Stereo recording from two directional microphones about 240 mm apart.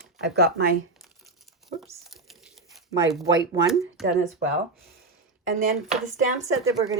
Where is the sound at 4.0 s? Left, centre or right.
Centre.